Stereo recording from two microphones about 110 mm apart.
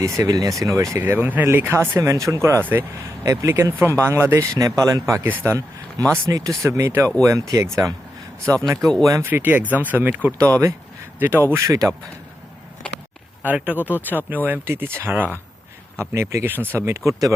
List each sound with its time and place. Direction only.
0.0 s speech: 30° right (ahead or behind)
1.0 s speech: 15° right (ahead or behind)
6.2 s speech: 30° right (ahead or behind)
8.8 s speech: 5° left (ahead or behind)
9.0 s speech: 30° right (ahead or behind)
9.3 s speech: 15° right (ahead or behind)
10.3 s speech: 25° right (ahead or behind)
13.4 s speech: 15° right (ahead or behind)
13.7 s speech: 15° left (ahead or behind)
14.4 s speech: 15° right (ahead or behind)